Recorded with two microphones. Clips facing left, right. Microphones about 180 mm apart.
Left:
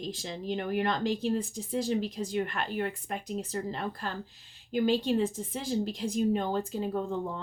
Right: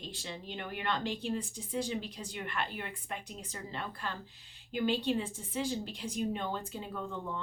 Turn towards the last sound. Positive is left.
turn(degrees=40)  # may be behind; listen again after turning